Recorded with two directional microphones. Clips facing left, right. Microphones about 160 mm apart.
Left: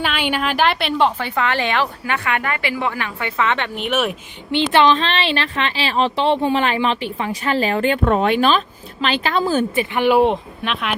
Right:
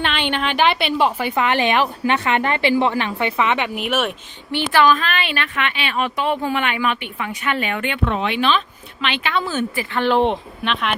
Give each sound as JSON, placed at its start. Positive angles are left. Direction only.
{"t": 0.0, "sound": "a woman's voice", "side_deg": 5}
{"t": 1.4, "sound": "a woman's voice", "side_deg": -20}
{"t": 4.5, "sound": "a woman's voice", "side_deg": 20}
{"t": 9.7, "sound": "a woman's voice", "side_deg": 15}